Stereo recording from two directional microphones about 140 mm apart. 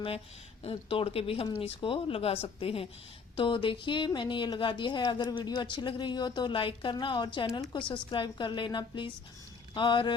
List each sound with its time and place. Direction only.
0.6 s speech: 40° left (ahead or behind)